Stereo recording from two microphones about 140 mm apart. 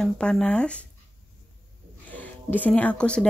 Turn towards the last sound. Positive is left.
turn(degrees=5)  # may be behind; listen again after turning